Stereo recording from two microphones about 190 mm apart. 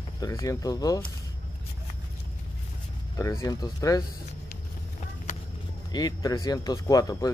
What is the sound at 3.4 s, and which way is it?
Speech, 20° left (ahead or behind).